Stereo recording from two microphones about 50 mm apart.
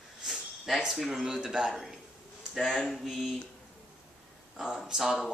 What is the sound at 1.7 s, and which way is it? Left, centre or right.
Speech, centre.